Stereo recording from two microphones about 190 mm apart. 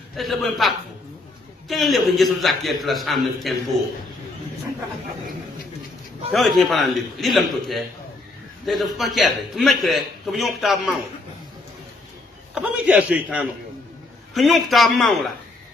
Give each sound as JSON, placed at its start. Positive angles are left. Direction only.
{"t": 0.1, "sound": "a man's voice", "side_deg": 0}
{"t": 6.3, "sound": "a man's voice", "side_deg": 0}
{"t": 12.5, "sound": "a man's voice", "side_deg": -5}